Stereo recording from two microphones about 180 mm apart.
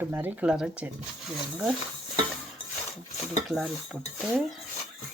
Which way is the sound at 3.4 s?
Centre (ahead or behind).